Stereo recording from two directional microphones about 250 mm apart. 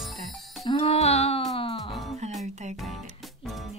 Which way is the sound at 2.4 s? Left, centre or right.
Right.